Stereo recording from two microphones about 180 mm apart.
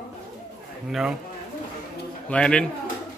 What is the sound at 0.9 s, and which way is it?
Speech, 5° right (ahead or behind).